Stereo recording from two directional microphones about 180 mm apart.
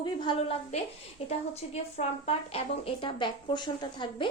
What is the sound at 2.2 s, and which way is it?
Speech, 35° left (ahead or behind).